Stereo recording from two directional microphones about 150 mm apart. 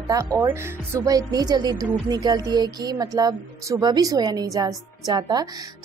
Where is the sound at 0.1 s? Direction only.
20° right (ahead or behind).